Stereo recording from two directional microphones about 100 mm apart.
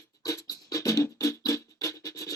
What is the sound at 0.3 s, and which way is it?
Music, 35° left (ahead or behind).